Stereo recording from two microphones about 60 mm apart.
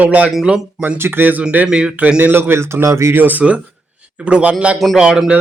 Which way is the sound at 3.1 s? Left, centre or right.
Right.